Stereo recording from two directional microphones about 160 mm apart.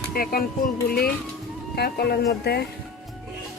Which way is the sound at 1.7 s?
90° left.